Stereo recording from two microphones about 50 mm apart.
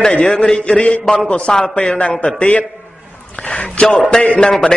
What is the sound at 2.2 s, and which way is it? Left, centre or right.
A man's voice, left.